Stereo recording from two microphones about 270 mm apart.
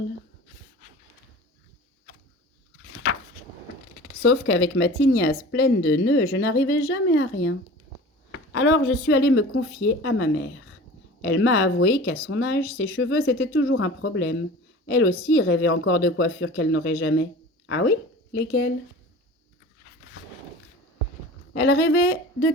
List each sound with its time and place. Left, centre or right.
4.2 s speech: left
21.5 s speech: left